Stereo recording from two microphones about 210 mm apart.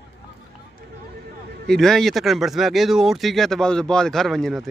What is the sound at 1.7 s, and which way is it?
Speech, centre (ahead or behind).